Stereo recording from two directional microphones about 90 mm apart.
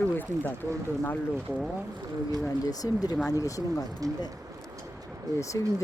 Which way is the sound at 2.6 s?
45° left (ahead or behind).